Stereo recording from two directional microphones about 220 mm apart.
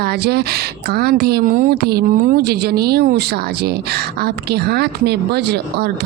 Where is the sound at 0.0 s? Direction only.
45° right (ahead or behind).